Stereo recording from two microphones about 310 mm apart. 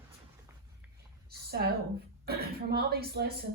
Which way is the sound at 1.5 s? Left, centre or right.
Right.